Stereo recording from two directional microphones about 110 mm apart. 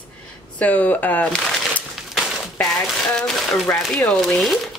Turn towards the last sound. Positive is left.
turn(degrees=0)  # may be behind; listen again after turning